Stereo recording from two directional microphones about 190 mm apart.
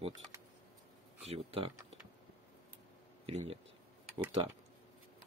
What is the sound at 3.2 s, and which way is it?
Speech, 30° right (ahead or behind).